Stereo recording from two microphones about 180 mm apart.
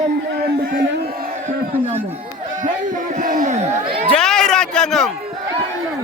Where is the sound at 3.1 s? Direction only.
45° right (ahead or behind).